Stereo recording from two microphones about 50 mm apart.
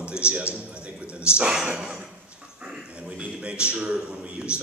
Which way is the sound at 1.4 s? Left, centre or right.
Centre.